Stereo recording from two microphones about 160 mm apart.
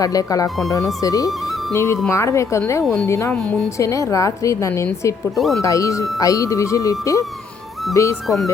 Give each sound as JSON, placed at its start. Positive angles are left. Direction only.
{"t": 0.0, "sound": "speech", "side_deg": 20}
{"t": 3.3, "sound": "speech", "side_deg": 5}
{"t": 3.8, "sound": "speech", "side_deg": 20}